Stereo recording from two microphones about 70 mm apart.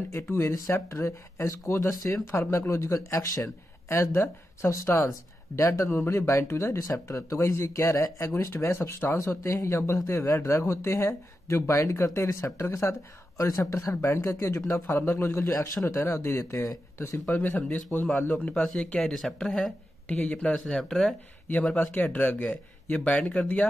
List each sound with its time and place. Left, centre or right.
0.1 s speech: left
3.9 s speech: left
6.8 s speech: left
13.4 s speech: left
13.7 s speech: left
15.5 s speech: left
17.3 s speech: left
18.5 s speech: centre
18.8 s speech: centre
19.1 s speech: centre
20.1 s speech: left
20.5 s speech: centre
21.7 s speech: left